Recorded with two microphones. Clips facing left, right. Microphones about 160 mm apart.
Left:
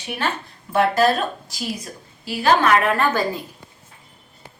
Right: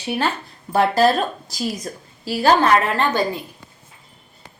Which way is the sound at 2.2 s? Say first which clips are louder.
Right 2 dB; 35° right (ahead or behind).